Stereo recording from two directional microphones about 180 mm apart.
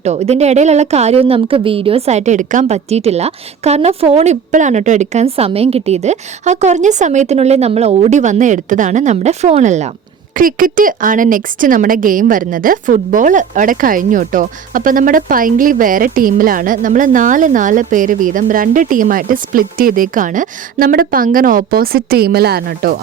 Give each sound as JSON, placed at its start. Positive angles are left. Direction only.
{"t": 0.0, "sound": "a woman's voice", "side_deg": -40}
{"t": 10.3, "sound": "a woman's voice", "side_deg": -50}